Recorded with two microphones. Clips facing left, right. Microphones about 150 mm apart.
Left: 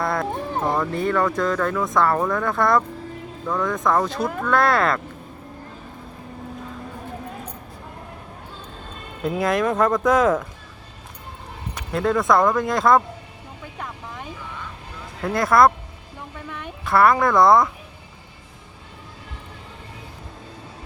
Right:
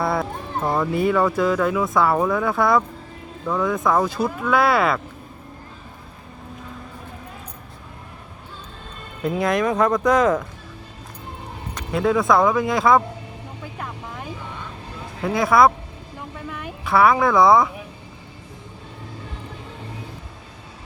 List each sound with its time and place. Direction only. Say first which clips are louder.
0.0 s music: right 1 dB; 5° right (ahead or behind)
0.7 s speech: right 4 dB; 5° right (ahead or behind)
9.2 s speech: even; centre (ahead or behind)
11.7 s speech: right 2 dB; centre (ahead or behind)
13.7 s vehicle: even; centre (ahead or behind)
15.2 s speech: even; centre (ahead or behind)
16.1 s a sound: right 2 dB; centre (ahead or behind)